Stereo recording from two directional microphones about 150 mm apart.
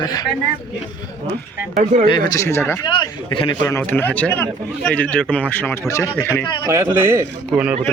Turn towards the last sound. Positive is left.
turn(degrees=-5)  # may be behind; listen again after turning